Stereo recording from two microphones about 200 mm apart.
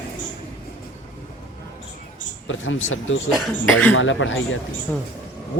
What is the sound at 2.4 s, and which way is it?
Speech, 75° left (ahead or behind).